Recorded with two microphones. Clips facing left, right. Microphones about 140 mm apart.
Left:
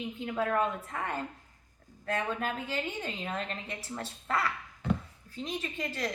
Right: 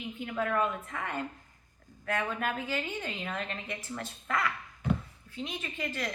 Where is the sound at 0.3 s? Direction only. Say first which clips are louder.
Even; 35° left (ahead or behind).